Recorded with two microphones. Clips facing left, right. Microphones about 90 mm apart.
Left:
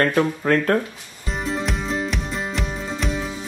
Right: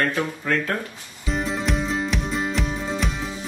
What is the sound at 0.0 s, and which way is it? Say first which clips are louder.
Speech: left 5 dB; 45° left (ahead or behind).